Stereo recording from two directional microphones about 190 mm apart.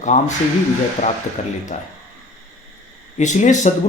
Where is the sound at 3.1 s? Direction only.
40° left (ahead or behind).